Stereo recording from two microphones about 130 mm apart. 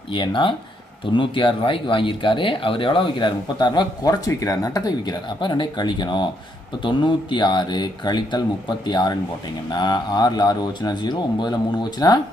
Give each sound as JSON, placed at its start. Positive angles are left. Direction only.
{"t": 0.1, "sound": "speech", "side_deg": 40}